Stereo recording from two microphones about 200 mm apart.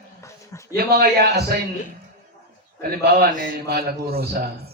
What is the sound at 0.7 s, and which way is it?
Speech, 50° right (ahead or behind).